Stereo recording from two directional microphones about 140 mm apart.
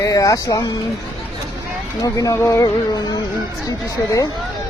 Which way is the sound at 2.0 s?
25° left (ahead or behind).